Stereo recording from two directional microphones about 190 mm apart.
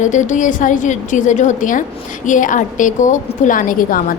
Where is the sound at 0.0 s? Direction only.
40° left (ahead or behind).